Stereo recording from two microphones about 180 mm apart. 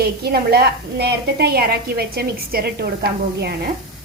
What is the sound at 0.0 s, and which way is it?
A woman's voice, 60° right (ahead or behind).